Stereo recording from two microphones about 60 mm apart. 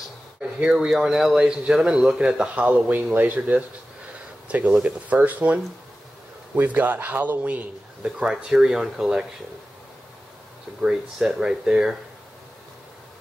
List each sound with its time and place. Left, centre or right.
0.4 s speech: centre; by 7.6 s right
8.3 s speech: centre
10.8 s speech: centre